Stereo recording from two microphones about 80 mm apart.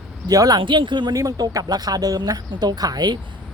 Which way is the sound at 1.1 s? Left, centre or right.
Right.